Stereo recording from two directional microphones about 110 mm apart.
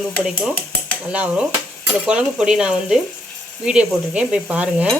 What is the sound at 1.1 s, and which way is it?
Speech, 10° right (ahead or behind).